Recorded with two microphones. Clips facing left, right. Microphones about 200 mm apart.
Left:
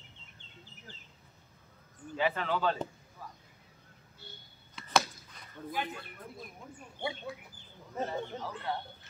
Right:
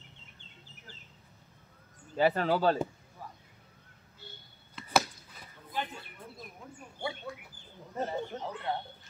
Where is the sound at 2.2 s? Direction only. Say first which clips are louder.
Right 5 dB; 40° right (ahead or behind).